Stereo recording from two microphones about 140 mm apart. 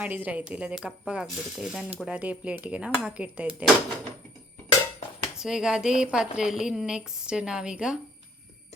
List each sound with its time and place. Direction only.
0.0 s speech: 10° right (ahead or behind)
5.4 s a woman's voice: 5° right (ahead or behind)